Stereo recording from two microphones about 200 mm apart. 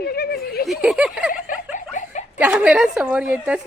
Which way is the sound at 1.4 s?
40° left (ahead or behind).